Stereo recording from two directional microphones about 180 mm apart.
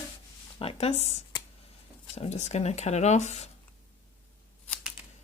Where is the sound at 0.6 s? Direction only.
35° left (ahead or behind).